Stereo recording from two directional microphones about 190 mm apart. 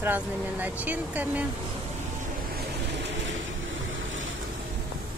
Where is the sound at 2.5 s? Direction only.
70° right (ahead or behind).